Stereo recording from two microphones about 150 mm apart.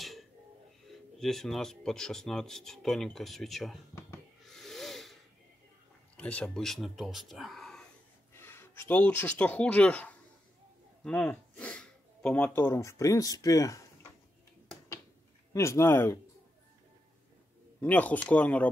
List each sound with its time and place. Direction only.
0.0 s a sound: centre (ahead or behind)
1.2 s speech: centre (ahead or behind)
4.5 s snake: centre (ahead or behind)
6.1 s speech: 10° left (ahead or behind)
8.3 s speech: 15° left (ahead or behind)
15.5 s speech: 20° left (ahead or behind)
17.7 s speech: 10° left (ahead or behind)